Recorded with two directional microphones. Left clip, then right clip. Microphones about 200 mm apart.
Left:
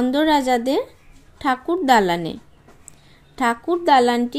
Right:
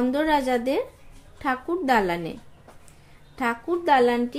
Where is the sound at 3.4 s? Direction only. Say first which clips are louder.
Left 5 dB; 35° left (ahead or behind).